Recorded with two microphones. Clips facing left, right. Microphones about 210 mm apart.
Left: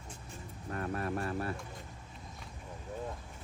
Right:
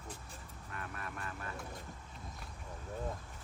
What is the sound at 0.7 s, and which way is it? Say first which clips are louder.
Vehicle: left 11 dB; 40° left (ahead or behind).